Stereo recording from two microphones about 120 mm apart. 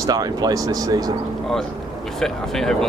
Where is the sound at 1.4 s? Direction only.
5° left (ahead or behind).